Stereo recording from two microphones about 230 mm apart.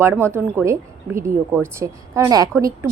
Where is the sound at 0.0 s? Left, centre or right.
Centre.